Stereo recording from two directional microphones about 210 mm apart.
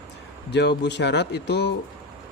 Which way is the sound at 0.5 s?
55° left (ahead or behind).